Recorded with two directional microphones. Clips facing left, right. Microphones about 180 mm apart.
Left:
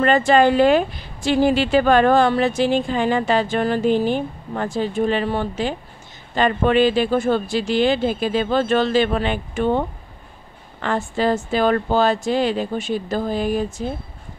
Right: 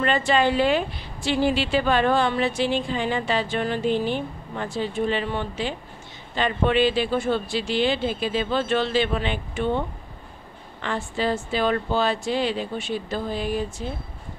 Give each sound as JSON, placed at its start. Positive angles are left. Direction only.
{"t": 0.0, "sound": "a woman's voice", "side_deg": 45}